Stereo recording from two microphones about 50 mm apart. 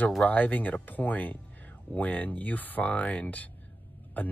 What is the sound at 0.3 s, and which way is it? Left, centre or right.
Speech, left.